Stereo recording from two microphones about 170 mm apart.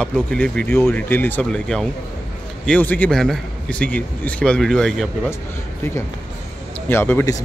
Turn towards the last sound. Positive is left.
turn(degrees=15)  # may be behind; listen again after turning